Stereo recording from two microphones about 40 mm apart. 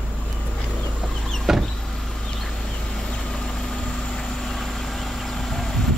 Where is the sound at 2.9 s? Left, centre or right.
Centre.